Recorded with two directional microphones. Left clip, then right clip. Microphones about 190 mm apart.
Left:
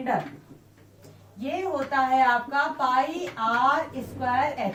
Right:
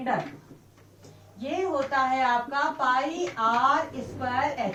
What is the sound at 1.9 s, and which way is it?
A woman's voice, centre (ahead or behind).